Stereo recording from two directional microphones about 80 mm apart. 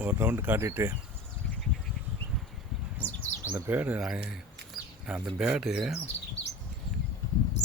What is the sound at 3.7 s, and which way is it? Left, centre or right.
Speech, right.